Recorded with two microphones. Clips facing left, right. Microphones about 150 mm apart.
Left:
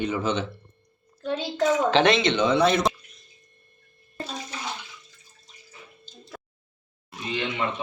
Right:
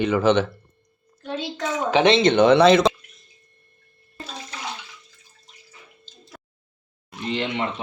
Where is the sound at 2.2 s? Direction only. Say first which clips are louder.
Right 7 dB; 60° right (ahead or behind); by 2.9 s 90° right.